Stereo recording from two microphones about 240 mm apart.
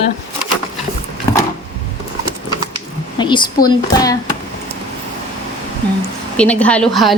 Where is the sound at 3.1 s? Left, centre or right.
Centre.